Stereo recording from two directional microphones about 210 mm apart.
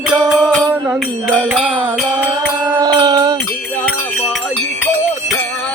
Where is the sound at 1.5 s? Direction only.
Centre (ahead or behind).